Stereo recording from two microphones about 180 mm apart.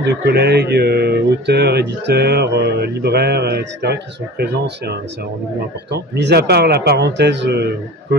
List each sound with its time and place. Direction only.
0.0 s a man's voice: 70° right (ahead or behind)